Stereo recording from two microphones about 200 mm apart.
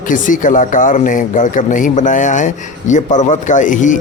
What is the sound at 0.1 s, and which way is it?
Speech, 40° left (ahead or behind).